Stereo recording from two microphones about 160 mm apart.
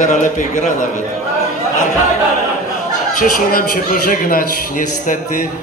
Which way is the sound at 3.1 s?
60° left (ahead or behind).